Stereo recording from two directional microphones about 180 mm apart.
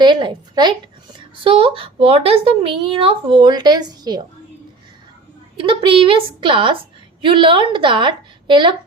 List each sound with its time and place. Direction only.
0.0 s a woman's voice: 25° right (ahead or behind)
5.5 s a woman's voice: 30° right (ahead or behind)